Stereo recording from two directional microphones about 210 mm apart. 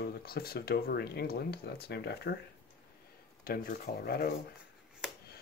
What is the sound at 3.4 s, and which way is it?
Speech, 45° left (ahead or behind).